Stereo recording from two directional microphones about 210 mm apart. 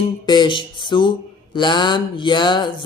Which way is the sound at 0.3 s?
20° left (ahead or behind).